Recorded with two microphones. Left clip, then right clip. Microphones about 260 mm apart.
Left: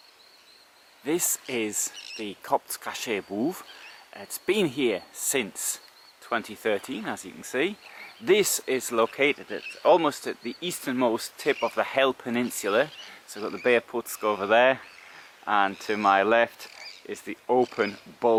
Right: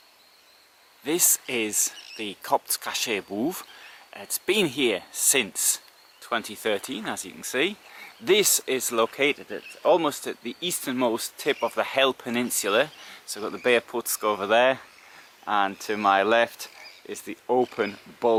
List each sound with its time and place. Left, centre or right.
1.0 s speech: centre
3.2 s speech: left
3.5 s speech: centre